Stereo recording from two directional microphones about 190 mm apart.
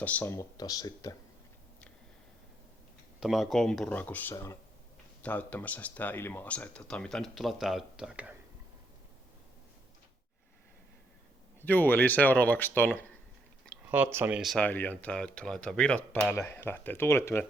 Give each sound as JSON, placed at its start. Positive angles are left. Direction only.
{"t": 0.0, "sound": "speech", "side_deg": 10}
{"t": 3.2, "sound": "speech", "side_deg": 0}
{"t": 11.6, "sound": "speech", "side_deg": 10}
{"t": 13.9, "sound": "speech", "side_deg": -10}